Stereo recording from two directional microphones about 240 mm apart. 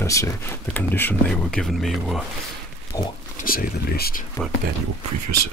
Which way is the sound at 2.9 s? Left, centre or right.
Centre.